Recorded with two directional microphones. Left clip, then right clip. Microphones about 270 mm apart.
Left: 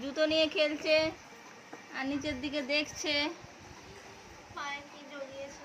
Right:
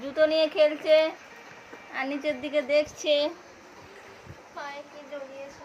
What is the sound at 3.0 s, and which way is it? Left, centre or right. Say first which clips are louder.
Speech: right 7 dB; left.